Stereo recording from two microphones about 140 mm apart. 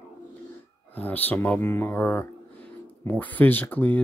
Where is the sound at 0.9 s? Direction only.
10° left (ahead or behind).